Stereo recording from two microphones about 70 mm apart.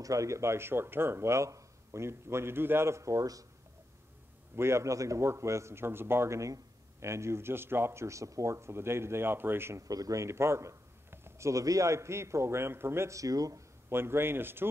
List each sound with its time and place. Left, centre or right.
0.0 s speech: right
4.6 s speech: right
9.8 s speech: right
13.8 s speech: right